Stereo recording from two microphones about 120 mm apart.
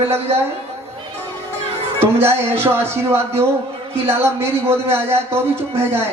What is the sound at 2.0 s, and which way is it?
Speech, 20° right (ahead or behind).